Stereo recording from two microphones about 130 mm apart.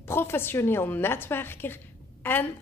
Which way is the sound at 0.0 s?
20° left (ahead or behind).